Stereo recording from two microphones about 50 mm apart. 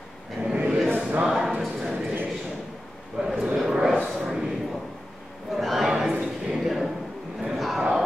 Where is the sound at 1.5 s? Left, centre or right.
Centre.